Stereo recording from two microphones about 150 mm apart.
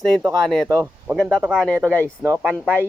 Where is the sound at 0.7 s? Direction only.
15° right (ahead or behind).